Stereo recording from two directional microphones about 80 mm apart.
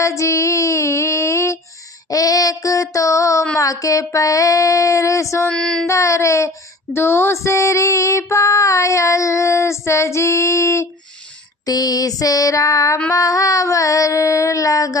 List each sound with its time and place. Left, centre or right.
0.0 s female singing: left
2.0 s child singing: left
5.5 s child singing: centre
5.9 s female singing: left
11.6 s child singing: left